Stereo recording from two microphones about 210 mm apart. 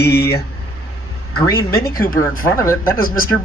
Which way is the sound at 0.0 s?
50° left (ahead or behind).